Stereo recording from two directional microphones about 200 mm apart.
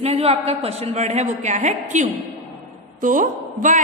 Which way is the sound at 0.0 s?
30° right (ahead or behind).